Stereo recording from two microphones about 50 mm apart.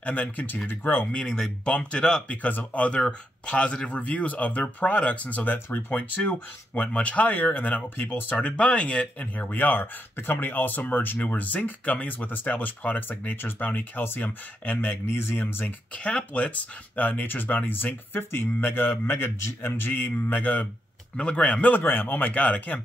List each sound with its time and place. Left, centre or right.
0.0 s speech: left
1.1 s speech: centre
2.4 s speech: left
5.7 s speech: left
5.9 s speech: left
9.2 s speech: left
13.4 s speech: left
16.0 s speech: left
21.2 s speech: left
21.7 s speech: left